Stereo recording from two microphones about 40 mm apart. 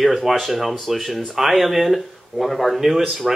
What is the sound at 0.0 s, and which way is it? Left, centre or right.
Speech, centre.